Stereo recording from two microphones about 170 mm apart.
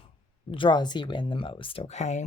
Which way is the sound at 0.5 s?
30° left (ahead or behind).